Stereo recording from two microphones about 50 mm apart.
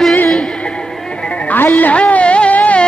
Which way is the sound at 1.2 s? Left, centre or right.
Left.